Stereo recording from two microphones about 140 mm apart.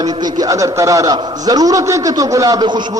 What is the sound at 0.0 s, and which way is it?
A man's voice, 30° right (ahead or behind).